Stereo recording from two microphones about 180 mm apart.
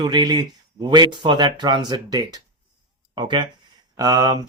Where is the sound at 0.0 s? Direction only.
25° right (ahead or behind).